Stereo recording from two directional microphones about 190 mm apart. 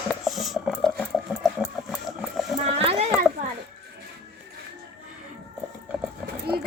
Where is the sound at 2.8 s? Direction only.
30° right (ahead or behind).